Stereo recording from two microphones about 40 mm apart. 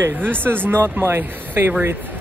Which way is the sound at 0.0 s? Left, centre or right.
Right.